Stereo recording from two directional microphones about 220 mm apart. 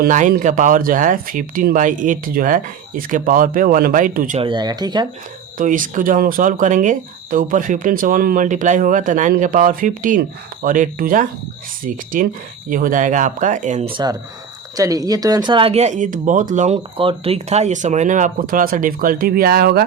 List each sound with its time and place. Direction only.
0.0 s speech: 35° right (ahead or behind)
4.4 s speech: 20° right (ahead or behind)
5.5 s speech: 35° right (ahead or behind)
14.8 s speech: 15° right (ahead or behind); by 19.8 s 45° right (ahead or behind)